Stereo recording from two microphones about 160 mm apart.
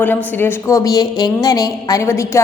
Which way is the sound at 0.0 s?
10° left (ahead or behind).